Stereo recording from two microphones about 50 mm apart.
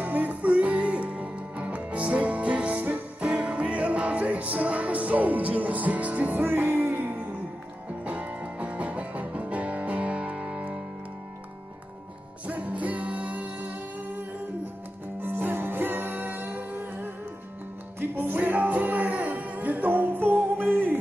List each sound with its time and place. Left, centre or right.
0.0 s music: right
6.5 s music: right
7.0 s music: right
12.4 s music: right
15.2 s music: right
18.1 s music: right